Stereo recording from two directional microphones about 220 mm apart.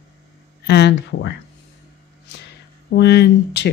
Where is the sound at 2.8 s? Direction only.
50° left (ahead or behind).